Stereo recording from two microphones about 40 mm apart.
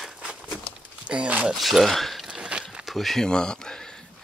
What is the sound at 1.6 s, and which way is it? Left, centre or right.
Speech, centre.